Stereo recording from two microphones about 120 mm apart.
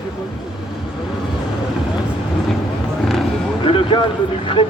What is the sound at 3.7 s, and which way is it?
Speech, 45° left (ahead or behind).